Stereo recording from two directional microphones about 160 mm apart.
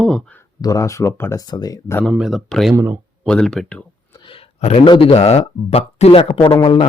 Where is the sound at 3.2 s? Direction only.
5° left (ahead or behind).